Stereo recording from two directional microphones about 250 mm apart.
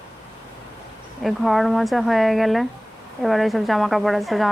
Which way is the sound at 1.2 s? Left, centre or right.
Centre.